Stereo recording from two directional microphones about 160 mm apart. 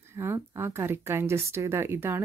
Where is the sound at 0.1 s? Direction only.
15° right (ahead or behind).